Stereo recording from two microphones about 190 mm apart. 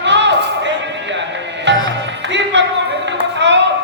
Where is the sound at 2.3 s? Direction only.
70° right (ahead or behind).